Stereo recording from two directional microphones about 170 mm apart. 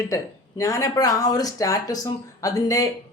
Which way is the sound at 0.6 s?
20° left (ahead or behind).